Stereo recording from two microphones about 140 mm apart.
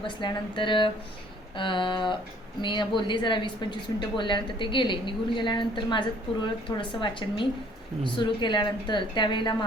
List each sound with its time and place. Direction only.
0.2 s a woman's voice: 35° left (ahead or behind)